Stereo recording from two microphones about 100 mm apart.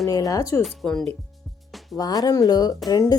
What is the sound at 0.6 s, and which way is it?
Speech, 5° left (ahead or behind).